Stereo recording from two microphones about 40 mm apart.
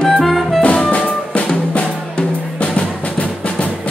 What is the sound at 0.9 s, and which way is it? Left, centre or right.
Music, left.